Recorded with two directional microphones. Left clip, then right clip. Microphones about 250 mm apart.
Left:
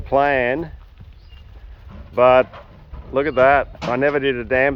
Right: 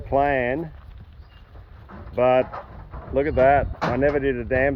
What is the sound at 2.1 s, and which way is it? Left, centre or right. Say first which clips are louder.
Speech: left 6 dB; left.